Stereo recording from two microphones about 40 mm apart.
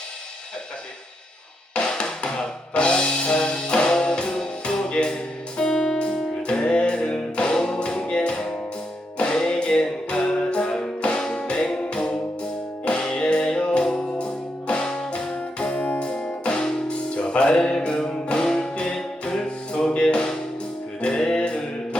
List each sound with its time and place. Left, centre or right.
2.0 s music: left
7.5 s music: centre; by 16.0 s left
16.4 s music: left